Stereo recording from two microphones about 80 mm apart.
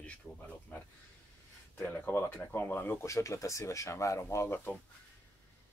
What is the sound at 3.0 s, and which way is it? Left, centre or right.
Speech, left.